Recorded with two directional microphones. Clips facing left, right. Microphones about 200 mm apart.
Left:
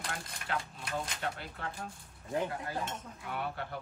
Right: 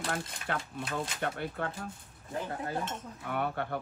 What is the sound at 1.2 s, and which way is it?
Speech, 55° right (ahead or behind).